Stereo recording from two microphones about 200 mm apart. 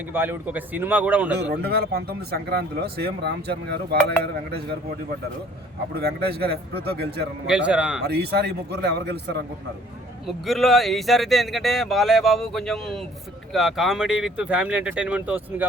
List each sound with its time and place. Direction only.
0.1 s a man's voice: 10° right (ahead or behind)
1.4 s speech: 55° right (ahead or behind)
5.9 s speech: 50° right (ahead or behind)
7.4 s speech: 5° right (ahead or behind)
8.0 s speech: 55° right (ahead or behind)
10.2 s speech: centre (ahead or behind)